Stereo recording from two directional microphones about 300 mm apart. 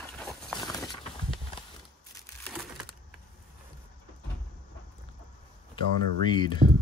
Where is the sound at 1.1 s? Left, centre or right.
Centre.